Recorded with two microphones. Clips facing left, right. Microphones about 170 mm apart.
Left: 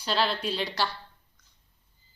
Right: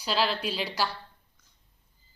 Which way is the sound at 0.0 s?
10° right (ahead or behind).